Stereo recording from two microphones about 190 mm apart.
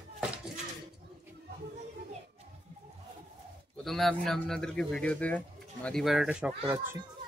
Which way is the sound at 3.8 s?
Centre (ahead or behind).